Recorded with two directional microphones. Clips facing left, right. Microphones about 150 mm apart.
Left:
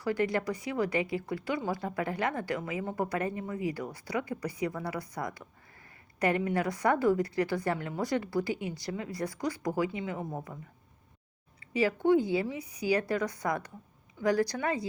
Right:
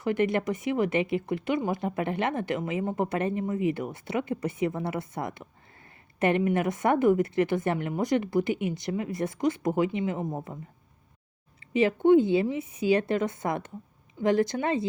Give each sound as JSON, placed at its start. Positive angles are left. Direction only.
{"t": 0.0, "sound": "speech", "side_deg": -20}
{"t": 11.6, "sound": "speech", "side_deg": -25}